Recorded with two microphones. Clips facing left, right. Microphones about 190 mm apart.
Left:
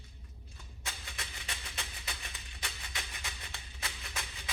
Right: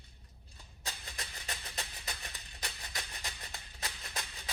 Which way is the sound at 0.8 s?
35° right (ahead or behind).